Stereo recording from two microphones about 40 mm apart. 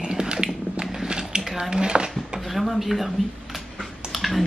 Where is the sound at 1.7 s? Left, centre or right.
Right.